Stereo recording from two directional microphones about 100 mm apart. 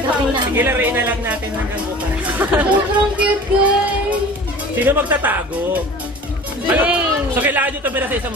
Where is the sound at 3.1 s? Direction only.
15° right (ahead or behind).